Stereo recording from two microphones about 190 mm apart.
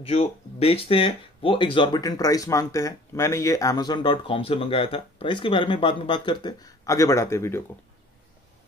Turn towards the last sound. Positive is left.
turn(degrees=15)  # may be behind; listen again after turning